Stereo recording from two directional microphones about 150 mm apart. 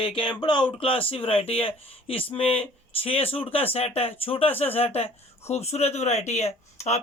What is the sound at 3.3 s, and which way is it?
Speech, 40° left (ahead or behind).